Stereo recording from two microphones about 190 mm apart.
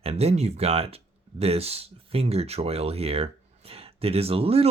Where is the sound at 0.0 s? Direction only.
30° right (ahead or behind).